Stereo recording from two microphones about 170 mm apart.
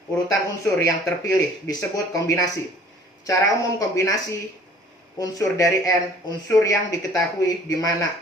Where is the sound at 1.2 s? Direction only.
20° left (ahead or behind).